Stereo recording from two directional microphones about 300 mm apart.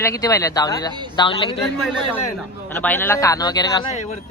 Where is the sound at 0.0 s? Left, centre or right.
Centre.